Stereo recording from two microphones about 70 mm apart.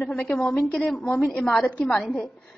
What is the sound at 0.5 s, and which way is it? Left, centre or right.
A woman's voice, centre.